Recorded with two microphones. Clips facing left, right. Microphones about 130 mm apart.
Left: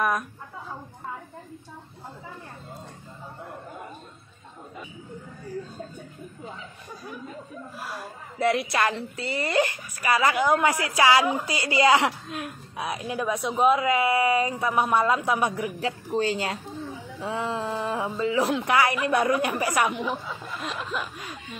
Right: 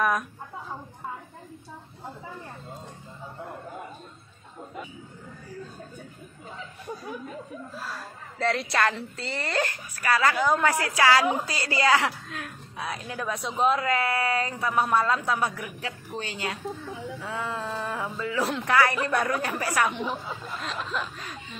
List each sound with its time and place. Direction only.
0.0 s speech: centre (ahead or behind)
7.7 s a woman's voice: 15° left (ahead or behind)
15.8 s speech: 30° left (ahead or behind)
17.2 s a sound: 20° left (ahead or behind)
18.7 s a woman's voice: 15° left (ahead or behind)
19.9 s a woman's voice: centre (ahead or behind)